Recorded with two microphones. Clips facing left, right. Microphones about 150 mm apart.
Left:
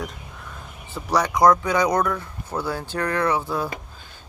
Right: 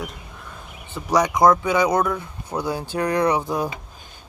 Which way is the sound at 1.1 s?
15° right (ahead or behind).